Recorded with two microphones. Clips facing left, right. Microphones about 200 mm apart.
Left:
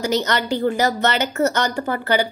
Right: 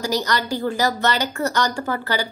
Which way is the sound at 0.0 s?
20° left (ahead or behind).